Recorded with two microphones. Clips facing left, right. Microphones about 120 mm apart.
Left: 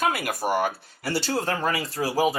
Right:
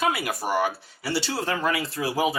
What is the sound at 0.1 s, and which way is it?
Speech, 45° left (ahead or behind).